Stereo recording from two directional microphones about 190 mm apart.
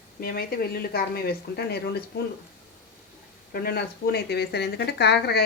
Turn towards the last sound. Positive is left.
turn(degrees=60)  # may be behind; listen again after turning